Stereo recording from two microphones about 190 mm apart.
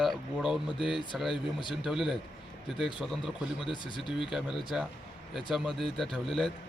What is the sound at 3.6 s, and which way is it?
Speech, 25° left (ahead or behind).